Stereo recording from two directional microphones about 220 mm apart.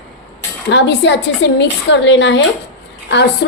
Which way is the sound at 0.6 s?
50° left (ahead or behind).